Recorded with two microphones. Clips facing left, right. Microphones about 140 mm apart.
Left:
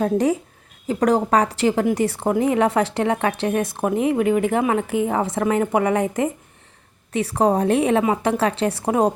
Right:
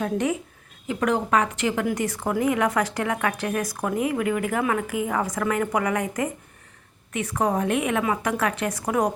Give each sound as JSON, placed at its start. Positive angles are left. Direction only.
{"t": 0.0, "sound": "a woman's voice", "side_deg": 35}